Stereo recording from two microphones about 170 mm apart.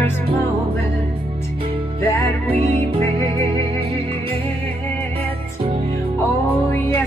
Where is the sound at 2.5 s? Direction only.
35° right (ahead or behind).